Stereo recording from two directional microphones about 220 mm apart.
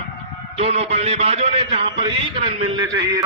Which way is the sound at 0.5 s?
30° right (ahead or behind).